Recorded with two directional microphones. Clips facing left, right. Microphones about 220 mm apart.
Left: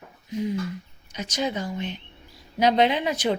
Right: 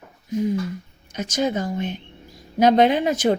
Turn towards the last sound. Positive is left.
turn(degrees=-50)  # may be behind; listen again after turning